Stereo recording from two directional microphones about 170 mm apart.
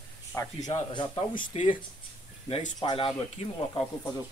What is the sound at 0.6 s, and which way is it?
Speech, 25° left (ahead or behind).